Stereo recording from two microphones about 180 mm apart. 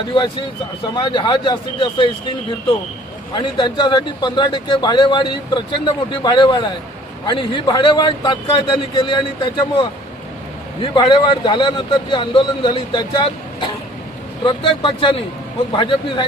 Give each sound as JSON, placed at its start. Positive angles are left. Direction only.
{"t": 0.9, "sound": "a man's voice", "side_deg": 25}
{"t": 3.3, "sound": "a man's voice", "side_deg": 25}
{"t": 10.9, "sound": "a man's voice", "side_deg": 25}